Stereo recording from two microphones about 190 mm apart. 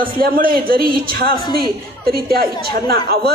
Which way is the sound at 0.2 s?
50° right (ahead or behind).